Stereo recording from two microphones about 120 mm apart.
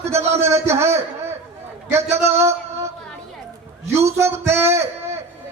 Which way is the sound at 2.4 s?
25° right (ahead or behind).